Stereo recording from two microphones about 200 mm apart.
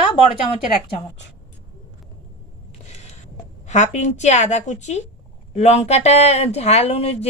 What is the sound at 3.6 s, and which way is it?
Speech, 35° left (ahead or behind).